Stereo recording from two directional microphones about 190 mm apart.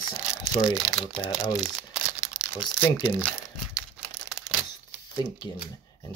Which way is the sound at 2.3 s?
5° right (ahead or behind).